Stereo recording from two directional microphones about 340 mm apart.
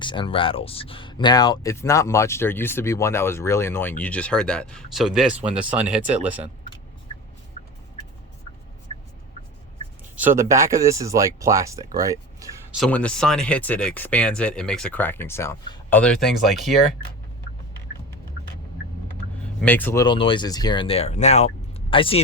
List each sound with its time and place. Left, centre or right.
0.0 s speech: centre
8.9 s a sound: centre
10.2 s speech: centre
19.6 s speech: centre